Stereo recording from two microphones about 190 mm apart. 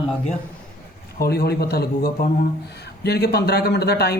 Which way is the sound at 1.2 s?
55° left (ahead or behind).